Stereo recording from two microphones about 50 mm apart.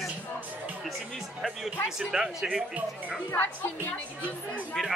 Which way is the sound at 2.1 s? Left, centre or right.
Centre.